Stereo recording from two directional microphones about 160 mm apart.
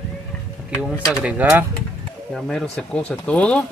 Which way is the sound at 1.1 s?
5° right (ahead or behind).